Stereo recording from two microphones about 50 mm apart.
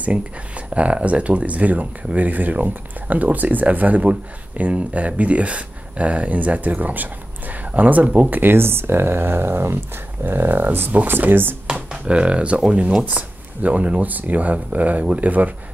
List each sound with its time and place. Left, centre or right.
0.0 s speech: right
8.3 s speech: right
11.6 s a sound: centre
12.1 s speech: right